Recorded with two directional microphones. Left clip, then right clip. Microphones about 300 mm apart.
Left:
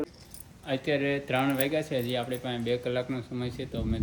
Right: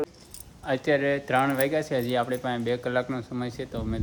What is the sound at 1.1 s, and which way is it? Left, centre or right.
Speech, centre.